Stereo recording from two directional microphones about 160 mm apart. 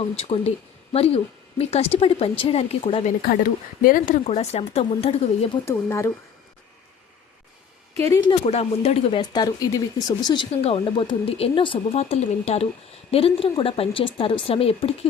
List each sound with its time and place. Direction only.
0.2 s speech: 40° left (ahead or behind)
3.2 s speech: 65° left (ahead or behind)
4.2 s speech: 40° left (ahead or behind)
5.6 s speech: 15° left (ahead or behind)
8.0 s speech: 20° left (ahead or behind)
8.3 s speech: 40° left (ahead or behind)
9.3 s speech: 25° left (ahead or behind)